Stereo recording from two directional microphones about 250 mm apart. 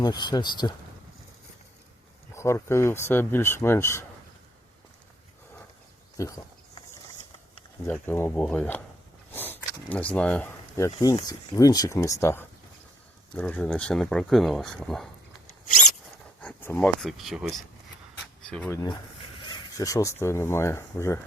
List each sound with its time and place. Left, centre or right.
0.0 s speech: centre
2.3 s speech: centre
6.1 s a sound: centre
7.9 s speech: centre
9.3 s a sound: centre
10.9 s speech: centre
16.4 s speech: centre
19.5 s speech: centre